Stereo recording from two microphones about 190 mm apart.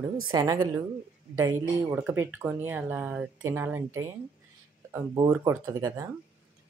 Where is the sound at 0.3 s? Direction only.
20° right (ahead or behind).